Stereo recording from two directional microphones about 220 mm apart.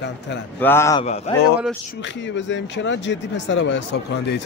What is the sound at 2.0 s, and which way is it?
Speech, 55° left (ahead or behind).